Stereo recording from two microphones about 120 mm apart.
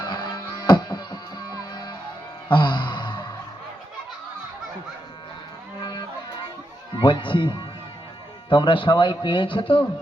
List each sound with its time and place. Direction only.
0.0 s music: 35° left (ahead or behind)
2.5 s a sound: 40° left (ahead or behind)
5.8 s music: 35° left (ahead or behind)
7.0 s speech: 45° left (ahead or behind)